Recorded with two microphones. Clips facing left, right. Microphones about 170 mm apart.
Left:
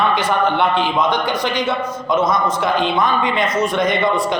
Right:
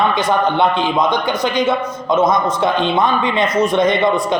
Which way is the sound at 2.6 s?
25° right (ahead or behind).